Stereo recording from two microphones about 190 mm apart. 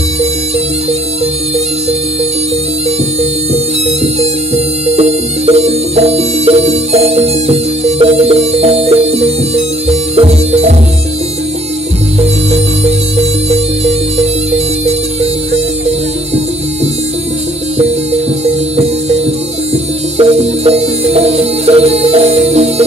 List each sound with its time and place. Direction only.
3.2 s music: 35° right (ahead or behind)
12.2 s music: 35° right (ahead or behind)
17.7 s music: 35° right (ahead or behind)